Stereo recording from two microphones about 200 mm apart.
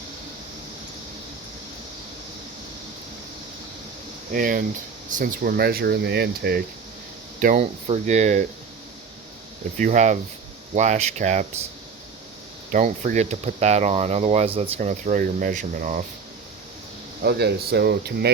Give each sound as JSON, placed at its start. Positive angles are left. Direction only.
{"t": 4.3, "sound": "speech", "side_deg": -45}
{"t": 7.4, "sound": "speech", "side_deg": -40}
{"t": 9.7, "sound": "speech", "side_deg": -35}
{"t": 12.7, "sound": "speech", "side_deg": -40}
{"t": 17.2, "sound": "speech", "side_deg": -55}